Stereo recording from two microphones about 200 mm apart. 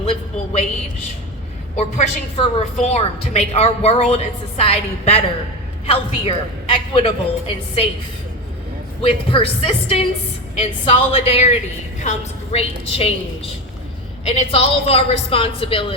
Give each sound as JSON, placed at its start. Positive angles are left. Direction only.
{"t": 0.0, "sound": "a sound", "side_deg": 30}
{"t": 1.7, "sound": "a woman's voice", "side_deg": 30}
{"t": 9.0, "sound": "a man's voice", "side_deg": 30}